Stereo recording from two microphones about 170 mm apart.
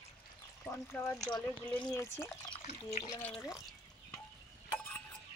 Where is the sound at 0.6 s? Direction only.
15° left (ahead or behind).